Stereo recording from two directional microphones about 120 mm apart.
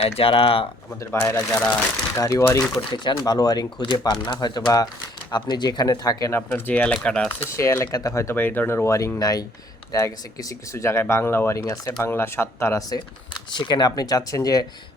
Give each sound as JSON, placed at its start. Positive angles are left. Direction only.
{"t": 0.0, "sound": "speech", "side_deg": 50}
{"t": 1.1, "sound": "speech", "side_deg": 25}
{"t": 2.7, "sound": "speech", "side_deg": 40}
{"t": 6.5, "sound": "speech", "side_deg": 15}
{"t": 7.3, "sound": "speech", "side_deg": 20}
{"t": 13.5, "sound": "speech", "side_deg": 40}